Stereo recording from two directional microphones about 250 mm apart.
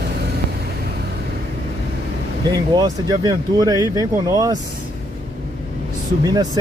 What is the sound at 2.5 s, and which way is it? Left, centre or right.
Speech, centre.